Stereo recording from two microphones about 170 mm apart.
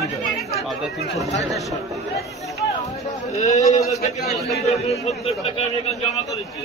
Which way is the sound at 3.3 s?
45° left (ahead or behind).